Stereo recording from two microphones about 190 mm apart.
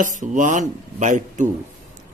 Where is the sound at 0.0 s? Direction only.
40° right (ahead or behind).